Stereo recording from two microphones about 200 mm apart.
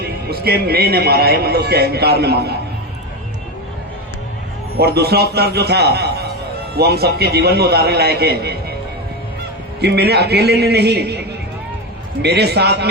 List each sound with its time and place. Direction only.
0.0 s speech: 50° right (ahead or behind)
4.8 s speech: 50° right (ahead or behind)
9.8 s a man's voice: 55° right (ahead or behind)